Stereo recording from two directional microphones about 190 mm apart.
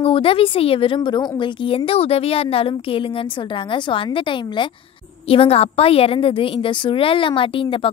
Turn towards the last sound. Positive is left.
turn(degrees=25)  # may be behind; listen again after turning